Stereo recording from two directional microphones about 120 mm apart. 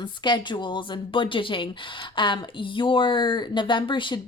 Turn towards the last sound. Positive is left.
turn(degrees=45)  # may be behind; listen again after turning